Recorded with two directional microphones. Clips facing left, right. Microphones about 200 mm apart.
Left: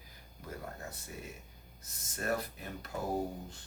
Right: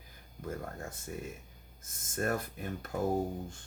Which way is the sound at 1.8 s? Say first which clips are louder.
Right 3 dB; 50° right (ahead or behind).